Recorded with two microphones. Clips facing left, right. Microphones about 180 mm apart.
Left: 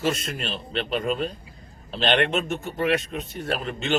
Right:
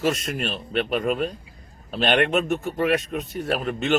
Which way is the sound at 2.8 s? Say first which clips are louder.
Even; 45° right (ahead or behind).